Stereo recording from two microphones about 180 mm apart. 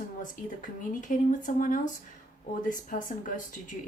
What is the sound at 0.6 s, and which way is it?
A woman's voice, 45° left (ahead or behind).